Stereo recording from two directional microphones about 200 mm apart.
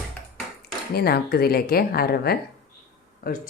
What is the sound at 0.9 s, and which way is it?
Speech, 50° left (ahead or behind).